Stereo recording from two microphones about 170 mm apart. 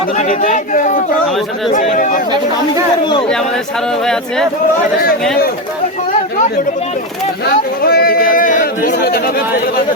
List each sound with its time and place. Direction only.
0.2 s speech: 45° left (ahead or behind)
4.0 s speech: 5° left (ahead or behind)
7.4 s speech: 65° left (ahead or behind)